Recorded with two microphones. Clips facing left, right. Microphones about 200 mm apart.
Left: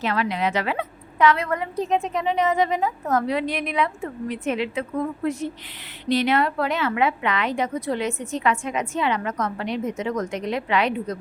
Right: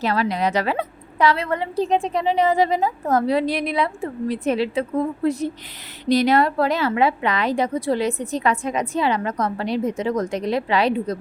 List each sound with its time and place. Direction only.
0.0 s a woman's voice: 35° right (ahead or behind)